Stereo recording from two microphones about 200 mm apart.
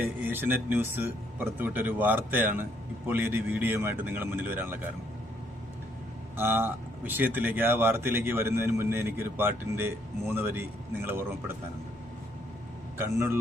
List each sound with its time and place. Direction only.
0.0 s speech: 10° right (ahead or behind)
6.3 s speech: 10° right (ahead or behind)
13.0 s speech: 10° right (ahead or behind)